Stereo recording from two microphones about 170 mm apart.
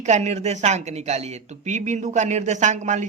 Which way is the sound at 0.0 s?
40° right (ahead or behind).